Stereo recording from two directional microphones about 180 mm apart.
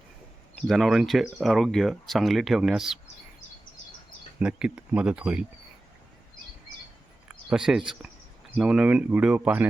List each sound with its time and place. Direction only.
0.7 s speech: centre (ahead or behind)
4.4 s speech: 5° right (ahead or behind)
7.3 s speech: 5° right (ahead or behind)